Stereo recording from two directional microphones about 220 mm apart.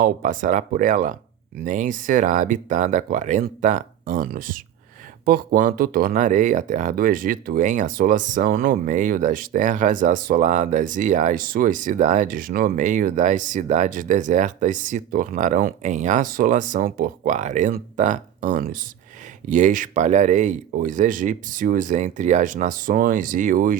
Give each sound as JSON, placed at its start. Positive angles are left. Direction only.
{"t": 0.0, "sound": "speech", "side_deg": -35}